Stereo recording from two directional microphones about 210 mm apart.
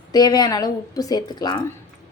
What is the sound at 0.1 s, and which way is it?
A woman's voice, 20° left (ahead or behind).